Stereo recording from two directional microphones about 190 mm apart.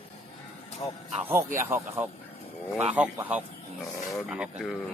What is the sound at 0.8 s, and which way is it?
Speech, 25° left (ahead or behind).